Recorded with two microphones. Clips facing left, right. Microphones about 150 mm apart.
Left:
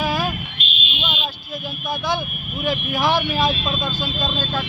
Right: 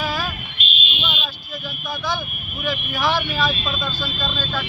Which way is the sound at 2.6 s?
20° left (ahead or behind).